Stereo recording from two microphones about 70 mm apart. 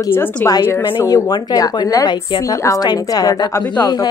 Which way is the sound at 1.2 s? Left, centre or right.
Left.